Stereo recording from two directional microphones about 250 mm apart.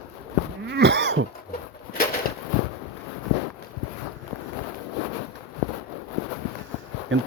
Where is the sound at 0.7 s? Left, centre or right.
Right.